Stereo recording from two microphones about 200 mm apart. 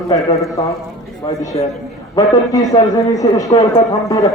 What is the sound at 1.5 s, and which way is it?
Speech, 30° left (ahead or behind).